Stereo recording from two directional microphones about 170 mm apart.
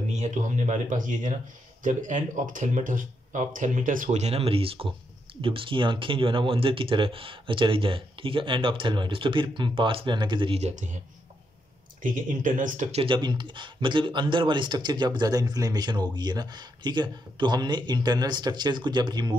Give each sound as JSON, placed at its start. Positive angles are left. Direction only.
{"t": 0.1, "sound": "speech", "side_deg": -45}
{"t": 12.0, "sound": "speech", "side_deg": -50}
{"t": 13.0, "sound": "speech", "side_deg": -25}